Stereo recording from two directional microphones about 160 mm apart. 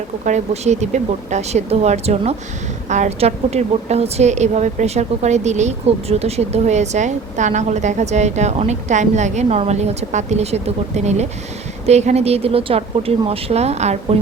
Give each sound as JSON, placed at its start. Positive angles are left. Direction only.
{"t": 0.3, "sound": "a woman's voice", "side_deg": -45}